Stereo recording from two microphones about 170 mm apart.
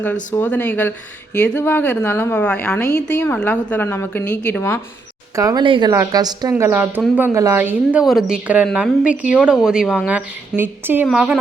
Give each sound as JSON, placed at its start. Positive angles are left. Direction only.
{"t": 0.3, "sound": "speech", "side_deg": 10}
{"t": 5.3, "sound": "a woman's voice", "side_deg": -20}